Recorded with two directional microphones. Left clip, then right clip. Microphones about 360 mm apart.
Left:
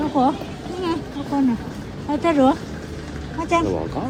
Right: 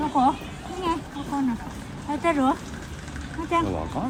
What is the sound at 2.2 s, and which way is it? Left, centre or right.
Speech, centre.